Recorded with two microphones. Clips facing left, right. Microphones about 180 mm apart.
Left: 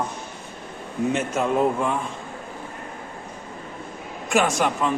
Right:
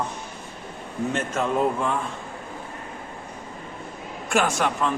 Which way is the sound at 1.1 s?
5° left (ahead or behind).